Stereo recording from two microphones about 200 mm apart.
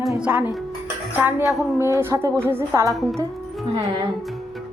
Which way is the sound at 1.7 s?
15° right (ahead or behind).